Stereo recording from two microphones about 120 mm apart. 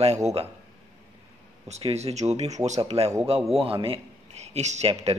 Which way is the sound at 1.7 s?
60° right (ahead or behind).